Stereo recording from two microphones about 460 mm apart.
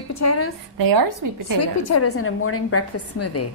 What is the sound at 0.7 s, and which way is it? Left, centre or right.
Speech, right.